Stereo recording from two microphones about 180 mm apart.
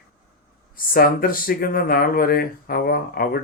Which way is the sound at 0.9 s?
55° left (ahead or behind).